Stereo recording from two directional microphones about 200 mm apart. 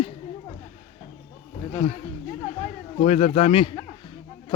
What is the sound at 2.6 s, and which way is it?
Speech, 30° left (ahead or behind).